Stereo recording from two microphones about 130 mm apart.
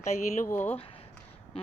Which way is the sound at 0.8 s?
45° left (ahead or behind).